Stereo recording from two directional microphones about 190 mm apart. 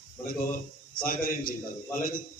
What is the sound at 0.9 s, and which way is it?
Speech, 50° left (ahead or behind).